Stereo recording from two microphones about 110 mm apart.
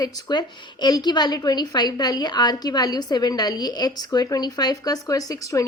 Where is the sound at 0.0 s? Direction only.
40° left (ahead or behind).